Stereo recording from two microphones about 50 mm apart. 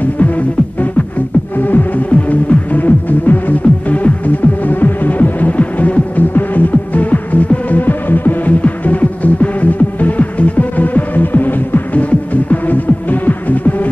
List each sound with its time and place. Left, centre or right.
1.6 s music: left
2.0 s music: left